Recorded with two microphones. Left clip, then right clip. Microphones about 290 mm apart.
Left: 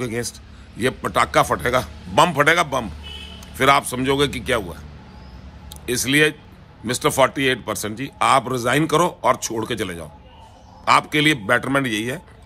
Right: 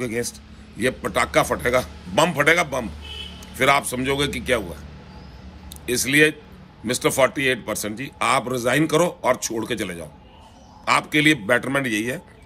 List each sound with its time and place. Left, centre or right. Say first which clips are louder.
0.0 s a man's voice: even; centre
5.9 s a man's voice: even; centre